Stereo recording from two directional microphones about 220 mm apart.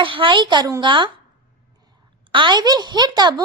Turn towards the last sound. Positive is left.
turn(degrees=-20)  # may be behind; listen again after turning